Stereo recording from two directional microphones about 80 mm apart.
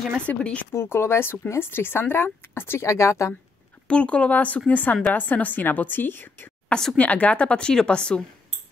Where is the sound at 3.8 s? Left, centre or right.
Centre.